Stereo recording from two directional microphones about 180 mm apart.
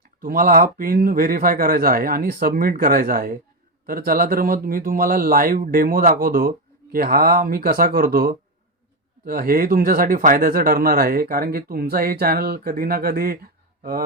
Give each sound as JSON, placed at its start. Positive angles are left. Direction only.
{"t": 0.2, "sound": "speech", "side_deg": -50}